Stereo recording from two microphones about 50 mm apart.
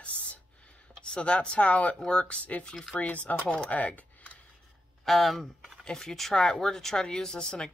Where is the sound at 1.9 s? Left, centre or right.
Centre.